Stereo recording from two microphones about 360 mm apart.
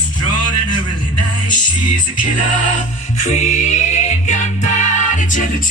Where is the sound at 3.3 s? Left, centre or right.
Centre.